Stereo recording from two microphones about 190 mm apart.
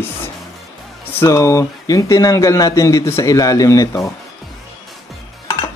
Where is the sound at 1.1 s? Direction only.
15° left (ahead or behind).